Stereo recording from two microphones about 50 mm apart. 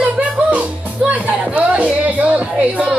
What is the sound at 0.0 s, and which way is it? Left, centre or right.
Music, right.